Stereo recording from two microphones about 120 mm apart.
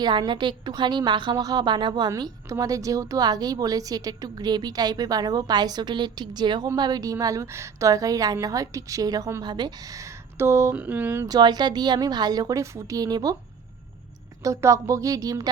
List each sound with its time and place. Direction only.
0.0 s a woman's voice: 40° right (ahead or behind); by 11.3 s 15° right (ahead or behind)
11.3 s a woman's voice: 35° right (ahead or behind)
14.4 s a woman's voice: 25° right (ahead or behind)